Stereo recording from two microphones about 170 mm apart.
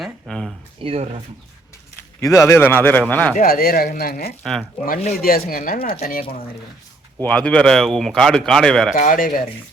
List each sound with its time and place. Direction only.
0.0 s a sound: centre (ahead or behind)
0.8 s speech: 35° right (ahead or behind)
2.2 s speech: 20° left (ahead or behind)
3.3 s speech: 55° left (ahead or behind)
7.2 s speech: 5° left (ahead or behind)
9.0 s speech: 55° left (ahead or behind)